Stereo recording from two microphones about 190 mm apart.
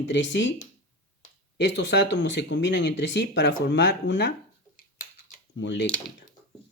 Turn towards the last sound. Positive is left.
turn(degrees=70)  # may be behind; listen again after turning